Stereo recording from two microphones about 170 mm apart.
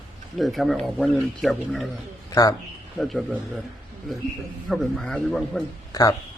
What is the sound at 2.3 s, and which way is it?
Speech, 20° left (ahead or behind).